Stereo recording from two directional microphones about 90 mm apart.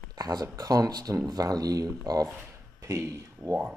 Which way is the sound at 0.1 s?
45° right (ahead or behind).